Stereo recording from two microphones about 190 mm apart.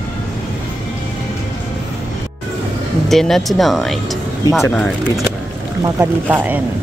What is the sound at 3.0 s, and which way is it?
Speech, centre (ahead or behind).